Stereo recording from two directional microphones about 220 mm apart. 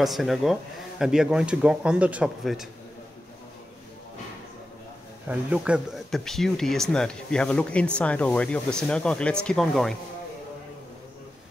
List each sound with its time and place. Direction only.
0.0 s speech: centre (ahead or behind)
5.3 s speech: 5° right (ahead or behind)